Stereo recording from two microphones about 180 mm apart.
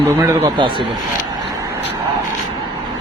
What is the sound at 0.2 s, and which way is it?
Speech, 15° right (ahead or behind).